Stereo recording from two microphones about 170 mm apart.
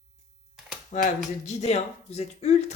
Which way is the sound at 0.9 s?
45° left (ahead or behind).